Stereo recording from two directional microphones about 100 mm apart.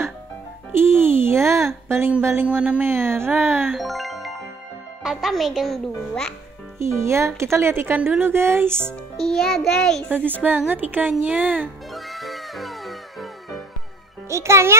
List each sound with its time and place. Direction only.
0.7 s music: 25° right (ahead or behind)
2.4 s speech: 15° right (ahead or behind)
3.6 s a child's voice: centre (ahead or behind)
6.8 s speech: 25° right (ahead or behind)
9.2 s a child's voice: 5° left (ahead or behind)
10.0 s speech: 20° right (ahead or behind)
11.9 s music: centre (ahead or behind)
14.3 s speech: 30° right (ahead or behind)